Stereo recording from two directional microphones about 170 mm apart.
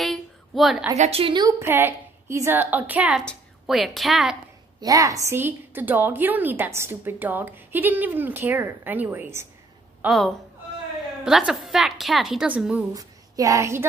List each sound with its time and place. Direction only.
0.0 s a sound: centre (ahead or behind)
0.9 s a woman's voice: 40° right (ahead or behind)
1.6 s a woman's voice: 15° right (ahead or behind)
4.7 s a woman's voice: 20° right (ahead or behind)
10.0 s a woman's voice: centre (ahead or behind)
12.9 s a woman's voice: 20° right (ahead or behind)